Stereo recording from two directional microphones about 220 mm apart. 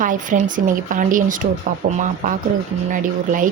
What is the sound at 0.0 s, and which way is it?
A woman's voice, 35° right (ahead or behind).